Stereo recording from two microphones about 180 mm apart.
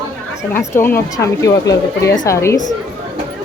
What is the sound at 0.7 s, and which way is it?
Speech, 15° left (ahead or behind).